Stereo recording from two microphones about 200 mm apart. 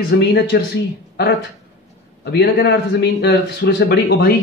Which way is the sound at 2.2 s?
55° left (ahead or behind).